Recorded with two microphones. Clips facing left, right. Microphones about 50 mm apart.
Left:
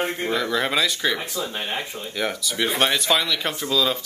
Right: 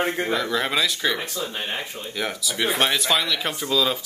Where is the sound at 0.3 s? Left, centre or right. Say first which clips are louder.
Left 1 dB; centre.